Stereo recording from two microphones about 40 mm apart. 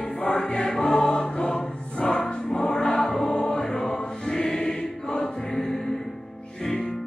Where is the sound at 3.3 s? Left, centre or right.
Centre.